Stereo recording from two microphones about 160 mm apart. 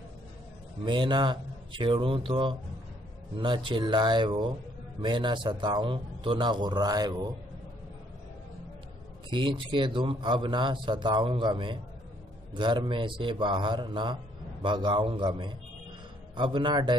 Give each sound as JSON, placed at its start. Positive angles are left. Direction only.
{"t": 0.8, "sound": "a man's voice", "side_deg": -30}
{"t": 9.3, "sound": "a man's voice", "side_deg": -30}